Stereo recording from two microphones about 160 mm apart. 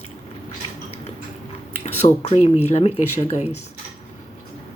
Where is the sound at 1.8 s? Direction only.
45° left (ahead or behind).